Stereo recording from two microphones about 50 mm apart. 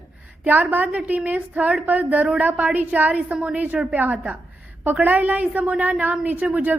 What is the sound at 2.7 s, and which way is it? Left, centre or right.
A woman's voice, right.